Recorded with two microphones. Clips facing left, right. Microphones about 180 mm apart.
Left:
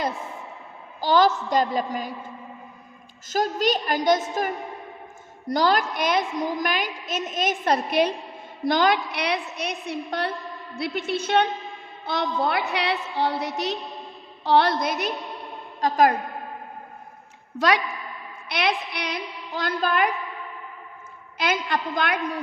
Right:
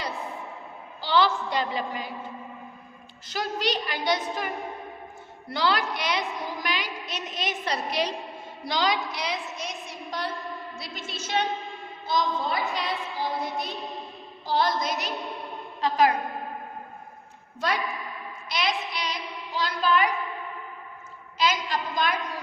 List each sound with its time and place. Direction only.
1.0 s a woman's voice: 45° left (ahead or behind)
3.2 s a woman's voice: 45° left (ahead or behind)
15.8 s a woman's voice: 45° left (ahead or behind)
17.6 s a woman's voice: 70° left (ahead or behind)
18.4 s a woman's voice: 60° left (ahead or behind)
21.3 s a woman's voice: 55° left (ahead or behind)